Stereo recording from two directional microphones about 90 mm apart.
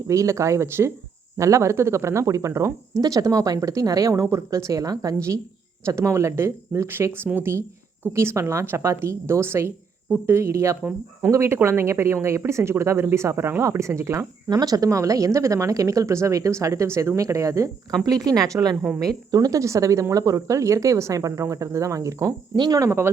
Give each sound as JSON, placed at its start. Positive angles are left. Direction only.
{"t": 0.1, "sound": "speech", "side_deg": -35}
{"t": 22.5, "sound": "speech", "side_deg": -50}
{"t": 22.8, "sound": "speech", "side_deg": -30}